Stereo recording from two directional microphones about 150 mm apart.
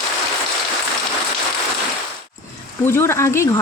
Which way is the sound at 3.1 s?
20° left (ahead or behind).